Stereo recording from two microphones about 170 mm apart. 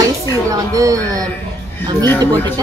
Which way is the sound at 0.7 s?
20° right (ahead or behind).